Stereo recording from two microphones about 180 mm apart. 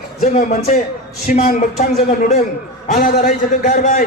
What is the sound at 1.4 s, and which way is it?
Speech, 55° left (ahead or behind).